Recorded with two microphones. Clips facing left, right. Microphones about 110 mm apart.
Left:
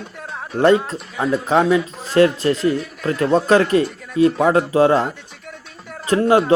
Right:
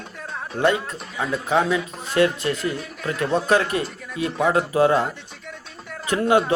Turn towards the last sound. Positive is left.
turn(degrees=35)  # may be behind; listen again after turning